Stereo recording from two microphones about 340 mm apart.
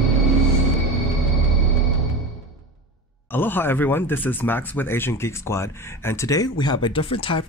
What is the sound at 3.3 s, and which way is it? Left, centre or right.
Speech, centre.